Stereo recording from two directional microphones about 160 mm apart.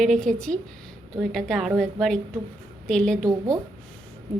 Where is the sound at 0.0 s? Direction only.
5° left (ahead or behind).